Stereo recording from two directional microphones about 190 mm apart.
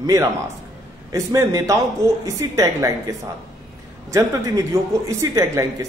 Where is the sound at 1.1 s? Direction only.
15° right (ahead or behind).